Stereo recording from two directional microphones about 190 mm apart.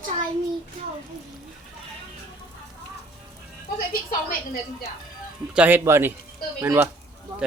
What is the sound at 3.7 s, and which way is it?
Speech, 50° left (ahead or behind).